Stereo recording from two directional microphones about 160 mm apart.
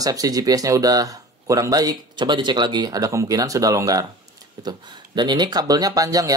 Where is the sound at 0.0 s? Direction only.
20° right (ahead or behind).